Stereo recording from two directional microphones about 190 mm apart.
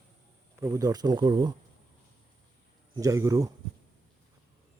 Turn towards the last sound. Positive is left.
turn(degrees=-15)  # may be behind; listen again after turning